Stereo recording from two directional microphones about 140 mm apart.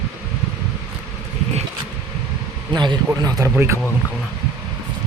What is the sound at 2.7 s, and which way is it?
Speech, 30° right (ahead or behind).